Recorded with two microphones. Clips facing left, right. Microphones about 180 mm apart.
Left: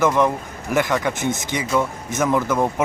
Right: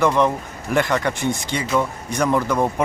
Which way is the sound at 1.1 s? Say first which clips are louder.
Even; 15° left (ahead or behind).